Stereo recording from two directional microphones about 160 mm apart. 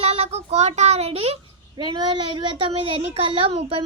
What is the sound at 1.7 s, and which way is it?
A woman's voice, 30° right (ahead or behind).